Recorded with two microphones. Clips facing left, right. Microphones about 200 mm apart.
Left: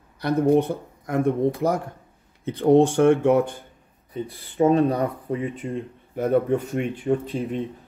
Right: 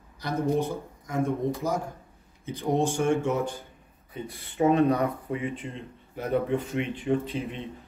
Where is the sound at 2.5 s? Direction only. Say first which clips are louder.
Left 9 dB; 60° left (ahead or behind).